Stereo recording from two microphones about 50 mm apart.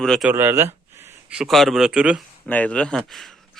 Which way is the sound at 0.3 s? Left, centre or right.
Right.